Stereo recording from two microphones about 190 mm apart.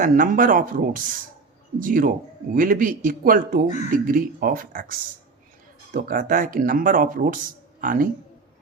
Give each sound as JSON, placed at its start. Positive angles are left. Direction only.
{"t": 0.0, "sound": "speech", "side_deg": -45}